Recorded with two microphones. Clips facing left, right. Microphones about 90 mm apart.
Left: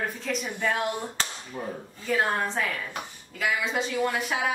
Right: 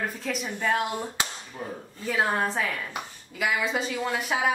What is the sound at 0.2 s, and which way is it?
A woman's voice, centre (ahead or behind).